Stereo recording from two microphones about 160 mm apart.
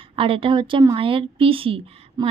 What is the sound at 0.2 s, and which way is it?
Speech, 35° right (ahead or behind).